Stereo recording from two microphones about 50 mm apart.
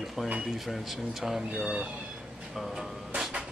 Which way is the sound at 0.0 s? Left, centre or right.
Centre.